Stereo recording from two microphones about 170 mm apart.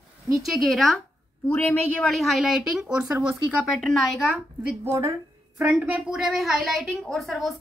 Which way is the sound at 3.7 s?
Centre (ahead or behind).